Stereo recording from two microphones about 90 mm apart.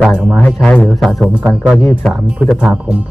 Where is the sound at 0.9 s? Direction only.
5° left (ahead or behind).